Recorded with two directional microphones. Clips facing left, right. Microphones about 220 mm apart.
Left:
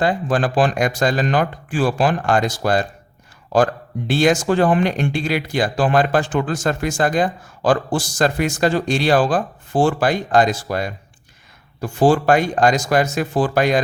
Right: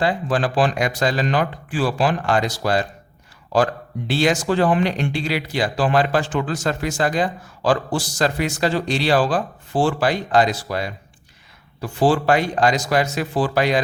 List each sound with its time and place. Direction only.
0.0 s speech: 45° left (ahead or behind)